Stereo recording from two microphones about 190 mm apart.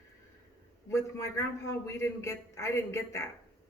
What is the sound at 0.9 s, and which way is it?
Speech, 15° left (ahead or behind).